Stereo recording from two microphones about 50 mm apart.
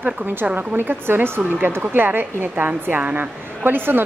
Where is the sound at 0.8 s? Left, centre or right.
Right.